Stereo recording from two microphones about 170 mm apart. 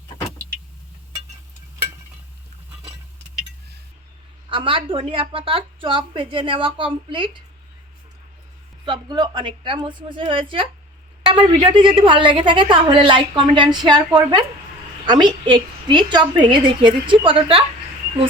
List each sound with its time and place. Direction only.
4.4 s a woman's voice: 30° right (ahead or behind)
8.8 s a woman's voice: 25° right (ahead or behind)